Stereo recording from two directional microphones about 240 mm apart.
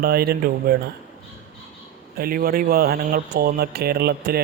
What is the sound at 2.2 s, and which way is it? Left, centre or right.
Speech, right.